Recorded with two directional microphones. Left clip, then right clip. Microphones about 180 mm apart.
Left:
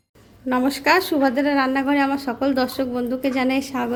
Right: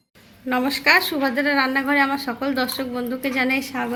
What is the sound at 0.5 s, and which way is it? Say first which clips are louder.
A woman's voice: right 1 dB; 40° left (ahead or behind).